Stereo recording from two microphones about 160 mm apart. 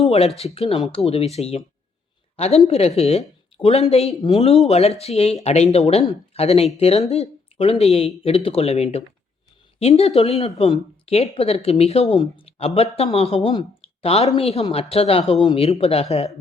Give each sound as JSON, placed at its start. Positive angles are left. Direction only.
{"t": 0.1, "sound": "a woman's voice", "side_deg": 40}